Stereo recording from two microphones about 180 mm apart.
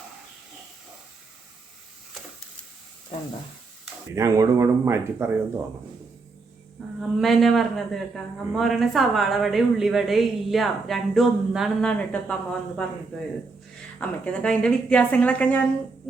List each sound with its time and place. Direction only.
4.1 s speech: 20° right (ahead or behind)
7.2 s a woman's voice: centre (ahead or behind)